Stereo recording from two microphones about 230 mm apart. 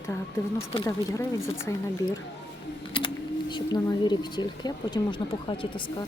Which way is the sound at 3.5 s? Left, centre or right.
Centre.